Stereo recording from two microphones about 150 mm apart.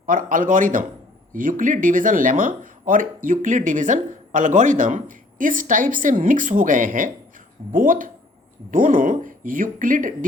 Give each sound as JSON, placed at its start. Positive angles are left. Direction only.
{"t": 0.0, "sound": "speech", "side_deg": -65}